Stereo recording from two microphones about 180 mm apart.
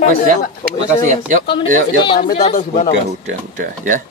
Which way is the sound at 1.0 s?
45° right (ahead or behind).